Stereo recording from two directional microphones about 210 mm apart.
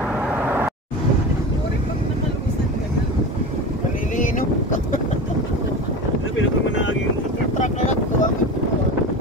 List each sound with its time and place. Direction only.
7.5 s boat: 35° left (ahead or behind)